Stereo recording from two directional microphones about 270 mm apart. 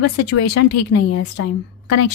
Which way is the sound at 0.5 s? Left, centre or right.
Left.